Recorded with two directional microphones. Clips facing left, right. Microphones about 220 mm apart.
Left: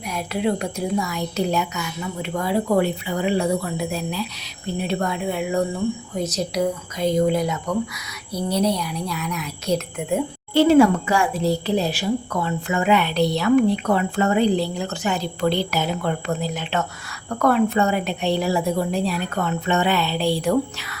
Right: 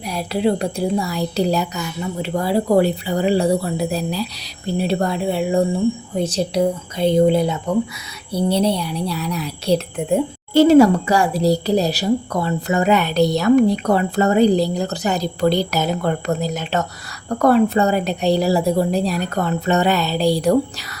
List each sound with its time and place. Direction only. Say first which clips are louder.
0.1 s speech: right 4 dB; 30° right (ahead or behind)